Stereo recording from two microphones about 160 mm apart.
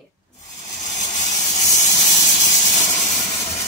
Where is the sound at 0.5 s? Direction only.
45° left (ahead or behind).